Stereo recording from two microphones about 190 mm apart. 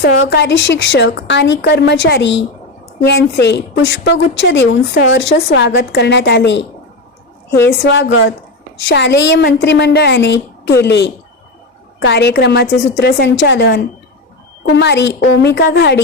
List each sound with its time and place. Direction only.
0.0 s a woman's voice: 65° left (ahead or behind)
7.9 s a woman's voice: 80° left
8.9 s a woman's voice: 70° left (ahead or behind)